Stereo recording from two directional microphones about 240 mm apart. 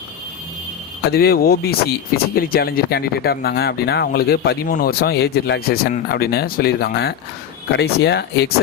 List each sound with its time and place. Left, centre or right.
1.1 s speech: left